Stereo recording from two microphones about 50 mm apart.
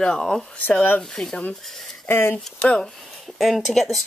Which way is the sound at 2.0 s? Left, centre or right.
Left.